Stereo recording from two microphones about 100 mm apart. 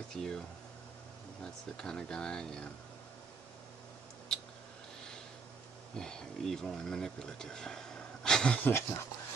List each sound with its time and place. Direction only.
0.1 s speech: 5° left (ahead or behind)
1.4 s speech: 5° left (ahead or behind)
5.9 s speech: 5° left (ahead or behind)
8.6 s speech: 25° left (ahead or behind)